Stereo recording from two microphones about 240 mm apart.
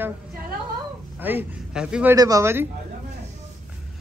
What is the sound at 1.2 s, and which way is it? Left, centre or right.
Speech, centre.